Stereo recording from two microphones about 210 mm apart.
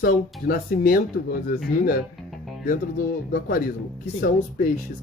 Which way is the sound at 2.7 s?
40° left (ahead or behind).